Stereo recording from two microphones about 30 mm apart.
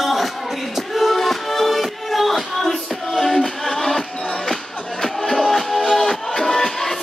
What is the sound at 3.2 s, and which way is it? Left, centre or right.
Music, centre.